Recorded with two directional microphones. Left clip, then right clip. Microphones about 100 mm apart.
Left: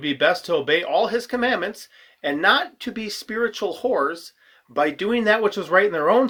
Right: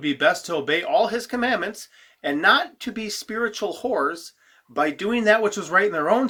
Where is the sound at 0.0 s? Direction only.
30° left (ahead or behind).